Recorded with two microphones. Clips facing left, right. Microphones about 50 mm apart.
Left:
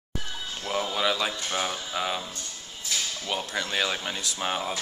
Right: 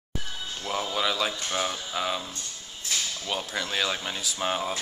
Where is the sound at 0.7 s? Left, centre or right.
Centre.